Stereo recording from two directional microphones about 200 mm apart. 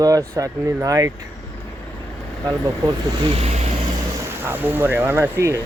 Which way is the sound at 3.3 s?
30° right (ahead or behind).